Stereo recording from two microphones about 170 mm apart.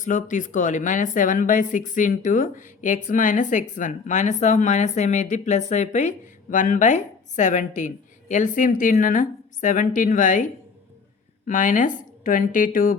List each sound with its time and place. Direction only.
0.0 s a woman's voice: 50° left (ahead or behind)